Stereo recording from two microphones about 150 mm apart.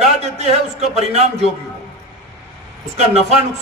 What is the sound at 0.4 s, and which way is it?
Speech, 45° right (ahead or behind).